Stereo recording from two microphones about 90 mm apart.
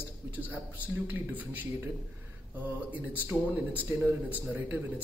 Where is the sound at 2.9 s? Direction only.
20° right (ahead or behind).